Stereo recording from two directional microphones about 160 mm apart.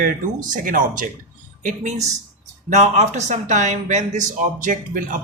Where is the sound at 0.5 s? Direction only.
55° right (ahead or behind).